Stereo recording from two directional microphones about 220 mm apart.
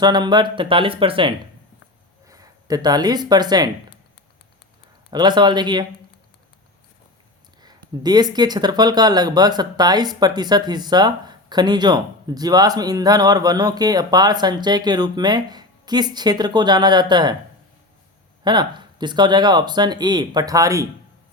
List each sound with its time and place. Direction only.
0.0 s speech: 20° right (ahead or behind)
5.1 s speech: 20° right (ahead or behind)
7.6 s speech: 20° right (ahead or behind)
18.4 s speech: 20° right (ahead or behind)